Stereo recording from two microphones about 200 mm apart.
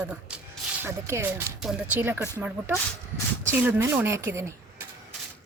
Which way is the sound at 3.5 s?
10° right (ahead or behind).